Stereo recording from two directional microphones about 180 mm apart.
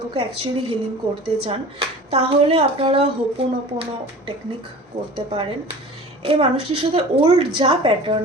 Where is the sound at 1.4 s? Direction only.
35° right (ahead or behind).